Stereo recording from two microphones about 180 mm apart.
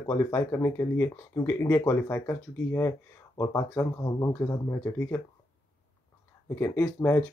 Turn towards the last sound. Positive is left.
turn(degrees=10)  # may be behind; listen again after turning